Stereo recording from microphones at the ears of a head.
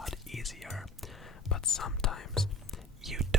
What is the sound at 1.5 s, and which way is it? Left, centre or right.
Whispering, left.